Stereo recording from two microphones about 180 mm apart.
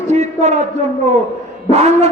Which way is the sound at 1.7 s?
35° right (ahead or behind).